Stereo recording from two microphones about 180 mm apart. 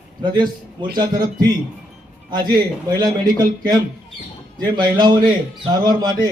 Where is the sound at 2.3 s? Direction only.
25° right (ahead or behind).